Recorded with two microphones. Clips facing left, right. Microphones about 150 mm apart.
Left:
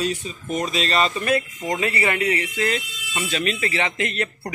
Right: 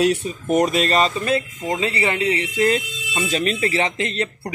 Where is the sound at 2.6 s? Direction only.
40° right (ahead or behind).